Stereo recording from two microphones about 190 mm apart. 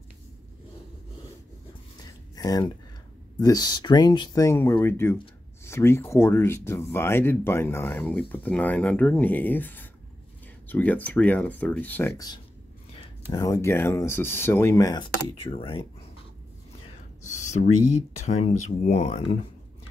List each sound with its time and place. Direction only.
2.3 s speech: 20° left (ahead or behind)
15.5 s speech: 30° left (ahead or behind)
17.2 s a sound: 40° left (ahead or behind)
18.2 s speech: 35° left (ahead or behind)